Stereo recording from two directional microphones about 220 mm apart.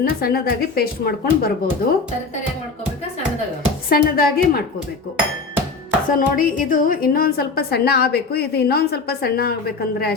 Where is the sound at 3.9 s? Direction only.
40° left (ahead or behind).